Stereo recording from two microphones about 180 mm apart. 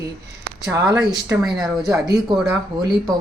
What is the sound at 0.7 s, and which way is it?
Speech, 20° right (ahead or behind).